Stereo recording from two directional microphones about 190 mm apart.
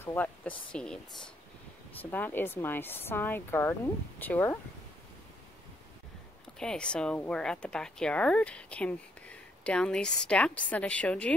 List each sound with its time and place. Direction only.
0.0 s speech: 10° left (ahead or behind)
6.6 s a woman's voice: 5° left (ahead or behind)